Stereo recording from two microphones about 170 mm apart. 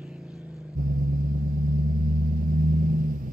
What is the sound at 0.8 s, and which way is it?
Vehicle, 55° right (ahead or behind).